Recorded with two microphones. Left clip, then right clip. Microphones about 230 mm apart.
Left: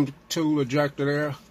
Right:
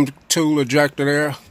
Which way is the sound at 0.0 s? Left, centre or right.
Right.